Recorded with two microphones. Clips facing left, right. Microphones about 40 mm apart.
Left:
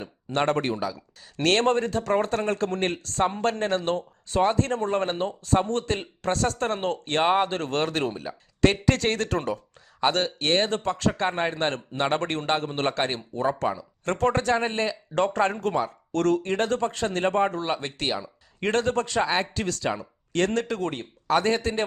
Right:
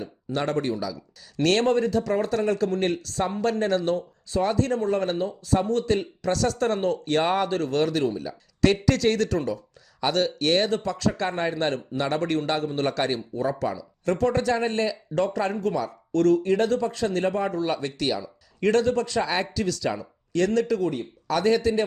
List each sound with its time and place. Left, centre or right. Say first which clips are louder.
0.3 s speech: left 2 dB; left
8.3 s a man's voice: left 1 dB; left
10.0 s a man's voice: even; left
16.1 s speech: right 3 dB; left
21.2 s a man's voice: right 1 dB; left